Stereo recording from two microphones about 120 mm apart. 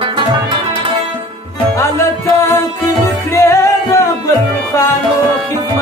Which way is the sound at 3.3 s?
25° left (ahead or behind).